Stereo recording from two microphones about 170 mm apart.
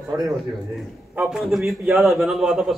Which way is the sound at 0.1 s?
15° right (ahead or behind).